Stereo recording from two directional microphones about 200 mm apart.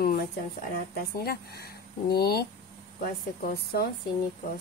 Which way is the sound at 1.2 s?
50° left (ahead or behind).